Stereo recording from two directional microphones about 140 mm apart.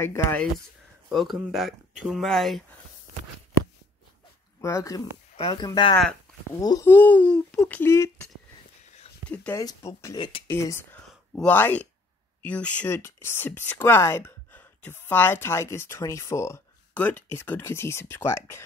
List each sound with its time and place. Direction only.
0.0 s speech: 20° left (ahead or behind)
1.0 s speech: centre (ahead or behind)
4.6 s speech: 20° left (ahead or behind)
5.3 s a sound: 45° left (ahead or behind)
5.6 s speech: 35° left (ahead or behind)
6.9 s speech: 15° left (ahead or behind)
9.5 s speech: 20° left (ahead or behind)
10.1 s speech: 35° left (ahead or behind)
10.5 s speech: 20° left (ahead or behind)